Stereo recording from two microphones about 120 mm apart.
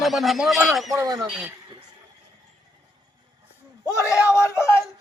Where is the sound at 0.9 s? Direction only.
30° right (ahead or behind).